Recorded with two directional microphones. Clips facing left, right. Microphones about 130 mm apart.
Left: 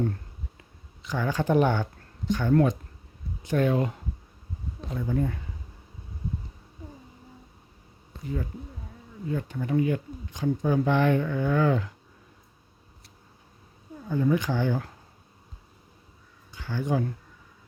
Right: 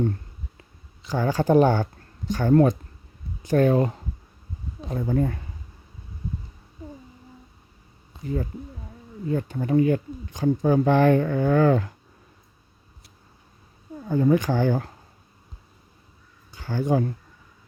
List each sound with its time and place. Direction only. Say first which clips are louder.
1.0 s speech: right 4 dB; 35° right (ahead or behind)
9.3 s speech: right 5 dB; 40° right (ahead or behind)
14.1 s speech: right 4 dB; 45° right (ahead or behind)
16.5 s speech: right 5 dB; 40° right (ahead or behind)